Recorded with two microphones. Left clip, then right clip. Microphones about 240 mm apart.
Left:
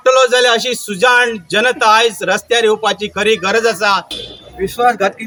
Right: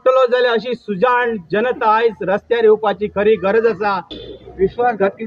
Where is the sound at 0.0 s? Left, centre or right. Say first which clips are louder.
Left 3 dB; centre.